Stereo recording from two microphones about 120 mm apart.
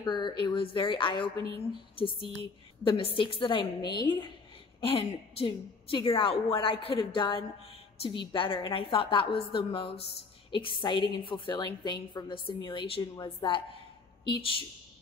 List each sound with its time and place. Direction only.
0.0 s a woman's voice: 40° left (ahead or behind)
4.7 s a woman's voice: 50° left (ahead or behind)